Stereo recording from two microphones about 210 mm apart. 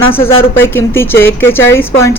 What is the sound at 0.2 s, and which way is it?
Speech, 25° left (ahead or behind).